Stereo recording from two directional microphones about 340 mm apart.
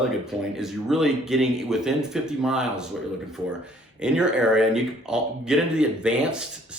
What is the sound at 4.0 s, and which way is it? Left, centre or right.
Speech, centre.